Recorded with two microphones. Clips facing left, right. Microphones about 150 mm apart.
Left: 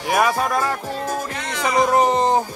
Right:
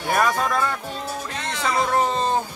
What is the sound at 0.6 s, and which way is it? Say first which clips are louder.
Speech: left 3 dB; 40° left (ahead or behind).